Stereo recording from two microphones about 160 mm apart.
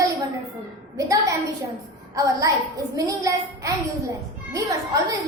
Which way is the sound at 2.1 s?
20° right (ahead or behind).